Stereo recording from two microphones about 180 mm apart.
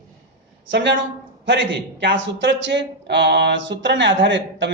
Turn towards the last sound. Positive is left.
turn(degrees=-80)